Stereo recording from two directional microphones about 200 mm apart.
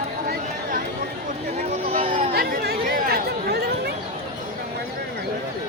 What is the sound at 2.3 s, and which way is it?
Chatter, 50° right (ahead or behind).